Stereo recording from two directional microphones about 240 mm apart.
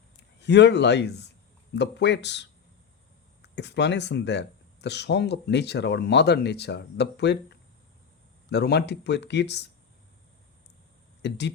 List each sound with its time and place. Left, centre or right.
0.3 s speech: left
8.4 s speech: left
11.2 s speech: left